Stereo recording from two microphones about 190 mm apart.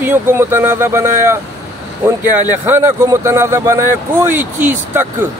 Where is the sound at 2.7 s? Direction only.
15° right (ahead or behind).